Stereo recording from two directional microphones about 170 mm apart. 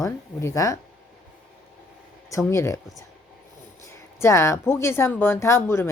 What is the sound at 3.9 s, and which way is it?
Speech, 15° left (ahead or behind).